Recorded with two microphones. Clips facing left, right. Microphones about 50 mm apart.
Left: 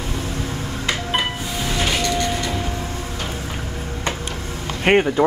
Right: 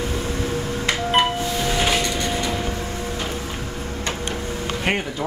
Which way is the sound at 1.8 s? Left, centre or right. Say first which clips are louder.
Left 3 dB; centre.